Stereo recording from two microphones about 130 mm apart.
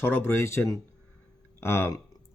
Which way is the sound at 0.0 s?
15° left (ahead or behind).